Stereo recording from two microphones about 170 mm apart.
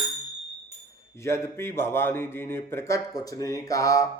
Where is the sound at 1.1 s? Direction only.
15° left (ahead or behind).